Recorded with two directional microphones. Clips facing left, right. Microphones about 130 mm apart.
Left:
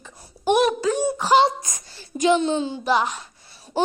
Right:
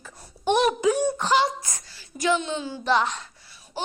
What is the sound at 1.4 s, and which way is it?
Speech, 20° left (ahead or behind).